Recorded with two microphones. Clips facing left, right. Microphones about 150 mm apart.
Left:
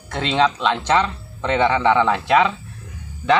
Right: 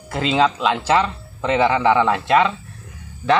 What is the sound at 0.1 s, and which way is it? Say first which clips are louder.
Speech: right 1 dB; 5° right (ahead or behind).